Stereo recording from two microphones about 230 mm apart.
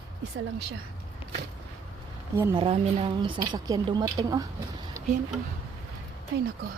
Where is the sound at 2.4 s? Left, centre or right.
Right.